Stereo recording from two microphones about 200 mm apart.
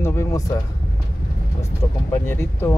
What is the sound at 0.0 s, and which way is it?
Vehicle, 15° left (ahead or behind).